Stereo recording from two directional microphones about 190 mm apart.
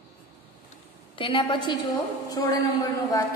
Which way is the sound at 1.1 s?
25° left (ahead or behind).